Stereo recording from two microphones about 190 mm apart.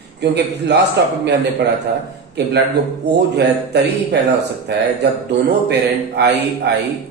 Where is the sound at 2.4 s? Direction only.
65° right (ahead or behind).